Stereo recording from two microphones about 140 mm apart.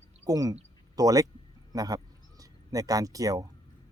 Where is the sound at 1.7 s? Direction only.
25° right (ahead or behind).